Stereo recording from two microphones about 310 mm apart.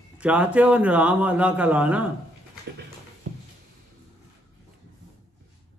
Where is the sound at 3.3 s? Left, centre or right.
Right.